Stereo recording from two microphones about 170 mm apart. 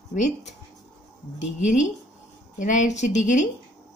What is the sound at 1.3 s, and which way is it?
A woman's voice, 45° left (ahead or behind).